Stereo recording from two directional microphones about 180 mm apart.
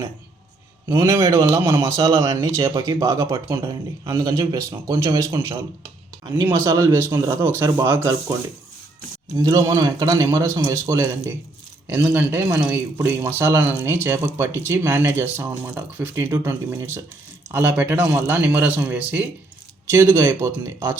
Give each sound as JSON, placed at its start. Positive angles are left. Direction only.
{"t": 0.9, "sound": "speech", "side_deg": -20}
{"t": 9.4, "sound": "speech", "side_deg": -20}